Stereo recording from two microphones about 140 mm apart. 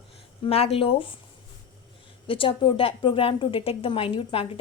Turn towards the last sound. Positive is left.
turn(degrees=40)  # may be behind; listen again after turning